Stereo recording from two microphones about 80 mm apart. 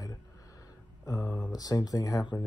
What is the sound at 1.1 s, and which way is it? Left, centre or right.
Speech, centre.